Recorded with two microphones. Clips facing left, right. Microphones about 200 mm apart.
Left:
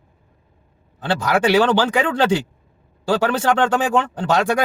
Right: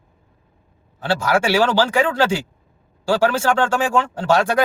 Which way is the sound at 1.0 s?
20° left (ahead or behind).